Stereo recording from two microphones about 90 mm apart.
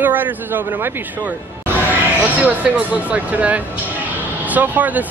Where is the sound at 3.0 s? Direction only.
15° right (ahead or behind).